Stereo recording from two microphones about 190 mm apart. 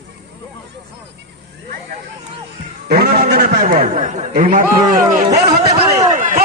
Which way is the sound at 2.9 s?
50° right (ahead or behind).